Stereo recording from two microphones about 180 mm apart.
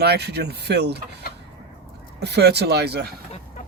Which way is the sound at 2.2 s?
65° right (ahead or behind).